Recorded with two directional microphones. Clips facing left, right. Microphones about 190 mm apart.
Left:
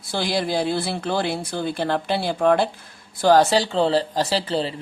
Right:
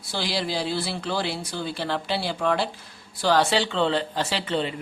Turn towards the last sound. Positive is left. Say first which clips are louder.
# left 3 dB
turn(degrees=35)  # may be behind; listen again after turning